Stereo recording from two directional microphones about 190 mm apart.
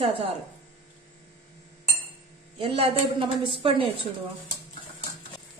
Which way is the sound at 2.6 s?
30° right (ahead or behind).